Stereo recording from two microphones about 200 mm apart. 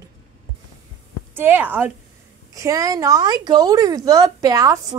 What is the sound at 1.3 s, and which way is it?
A woman's voice, 10° right (ahead or behind).